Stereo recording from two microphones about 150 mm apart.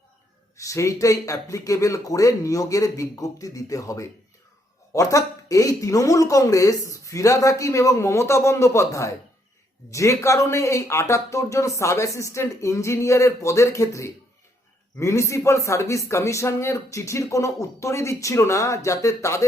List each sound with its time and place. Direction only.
0.6 s speech: 20° left (ahead or behind)